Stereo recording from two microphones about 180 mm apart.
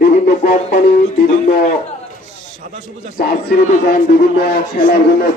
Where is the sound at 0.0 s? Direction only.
50° left (ahead or behind).